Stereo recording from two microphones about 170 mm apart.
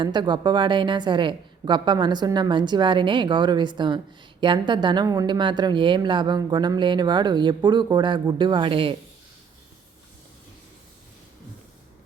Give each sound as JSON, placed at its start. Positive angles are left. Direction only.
{"t": 0.0, "sound": "a woman's voice", "side_deg": -25}